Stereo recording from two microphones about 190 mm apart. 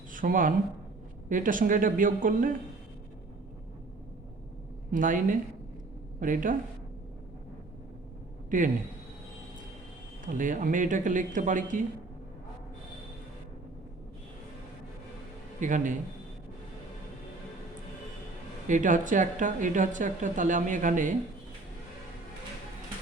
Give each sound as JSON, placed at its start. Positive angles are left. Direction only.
{"t": 0.1, "sound": "speech", "side_deg": -45}
{"t": 4.9, "sound": "speech", "side_deg": -45}
{"t": 8.4, "sound": "a man's voice", "side_deg": -45}
{"t": 10.3, "sound": "speech", "side_deg": -45}
{"t": 15.6, "sound": "speech", "side_deg": -40}
{"t": 18.7, "sound": "speech", "side_deg": -40}